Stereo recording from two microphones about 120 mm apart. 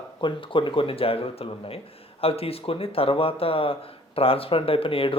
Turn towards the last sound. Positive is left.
turn(degrees=50)  # may be behind; listen again after turning